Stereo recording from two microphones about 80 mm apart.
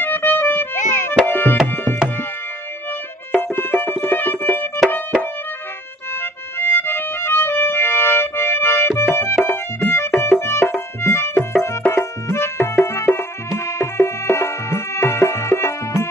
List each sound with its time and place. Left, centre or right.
0.0 s music: left
1.2 s tabla: left
3.3 s music: left
6.6 s music: left